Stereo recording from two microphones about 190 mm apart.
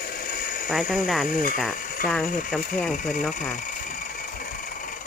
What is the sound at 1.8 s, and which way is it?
Mechanisms, 45° left (ahead or behind).